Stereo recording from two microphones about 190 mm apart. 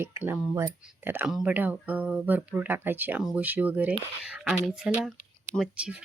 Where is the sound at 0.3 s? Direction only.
10° right (ahead or behind).